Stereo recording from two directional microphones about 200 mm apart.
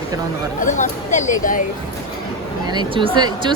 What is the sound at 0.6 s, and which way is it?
Speech, 40° left (ahead or behind).